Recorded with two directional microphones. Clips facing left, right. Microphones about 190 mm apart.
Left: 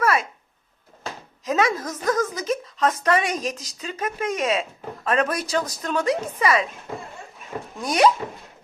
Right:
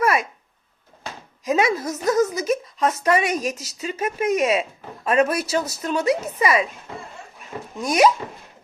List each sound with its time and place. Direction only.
0.0 s a sound: 15° right (ahead or behind)
1.5 s speech: 10° right (ahead or behind)
7.8 s speech: 10° right (ahead or behind)